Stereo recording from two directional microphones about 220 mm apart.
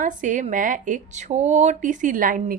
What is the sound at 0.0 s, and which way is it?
Speech, 35° right (ahead or behind).